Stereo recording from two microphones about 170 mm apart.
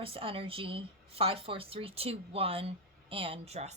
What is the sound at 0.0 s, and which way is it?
A woman's voice, 30° right (ahead or behind).